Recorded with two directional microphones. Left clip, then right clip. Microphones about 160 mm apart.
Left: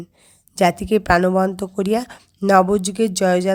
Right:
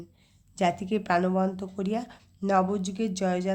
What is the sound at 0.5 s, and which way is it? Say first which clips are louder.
Speech: left 10 dB; 50° left (ahead or behind).